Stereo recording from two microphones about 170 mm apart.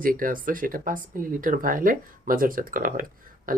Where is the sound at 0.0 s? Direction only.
55° right (ahead or behind).